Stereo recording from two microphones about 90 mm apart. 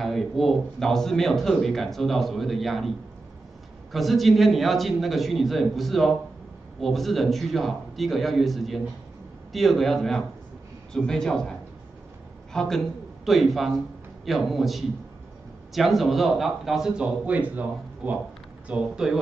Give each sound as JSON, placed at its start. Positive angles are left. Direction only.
{"t": 0.0, "sound": "speech", "side_deg": 0}
{"t": 3.9, "sound": "a man's voice", "side_deg": 0}
{"t": 12.5, "sound": "a man's voice", "side_deg": 5}